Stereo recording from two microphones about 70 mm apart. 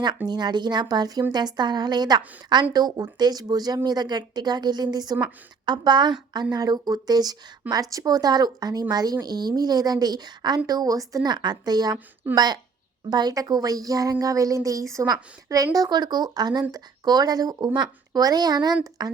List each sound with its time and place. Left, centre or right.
0.3 s a woman's voice: right
1.3 s a woman's voice: right
2.7 s speech: right
3.8 s speech: right
5.6 s a woman's voice: right
6.3 s speech: right
7.7 s speech: right
10.7 s a woman's voice: right